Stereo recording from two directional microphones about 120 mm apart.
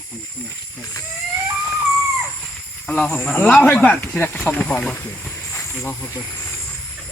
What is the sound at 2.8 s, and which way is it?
Speech, 5° left (ahead or behind).